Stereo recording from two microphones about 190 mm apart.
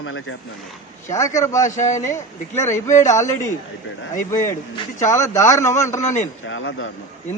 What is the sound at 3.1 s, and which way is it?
Speech, 15° left (ahead or behind).